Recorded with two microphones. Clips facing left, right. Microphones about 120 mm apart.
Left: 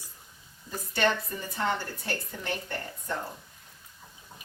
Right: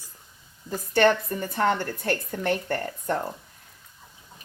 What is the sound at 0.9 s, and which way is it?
A woman's voice, 50° right (ahead or behind).